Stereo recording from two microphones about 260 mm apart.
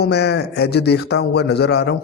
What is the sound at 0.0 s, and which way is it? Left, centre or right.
Speech, left.